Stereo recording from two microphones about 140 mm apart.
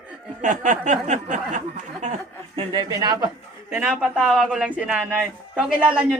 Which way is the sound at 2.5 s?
35° right (ahead or behind).